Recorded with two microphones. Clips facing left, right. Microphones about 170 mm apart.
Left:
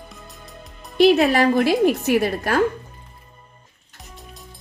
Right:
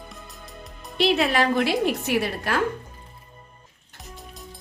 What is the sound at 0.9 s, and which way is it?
A woman's voice, 45° left (ahead or behind).